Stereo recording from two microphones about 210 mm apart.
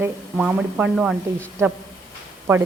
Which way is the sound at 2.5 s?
10° right (ahead or behind).